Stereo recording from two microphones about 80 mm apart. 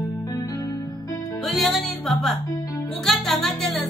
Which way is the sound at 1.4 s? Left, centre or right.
Centre.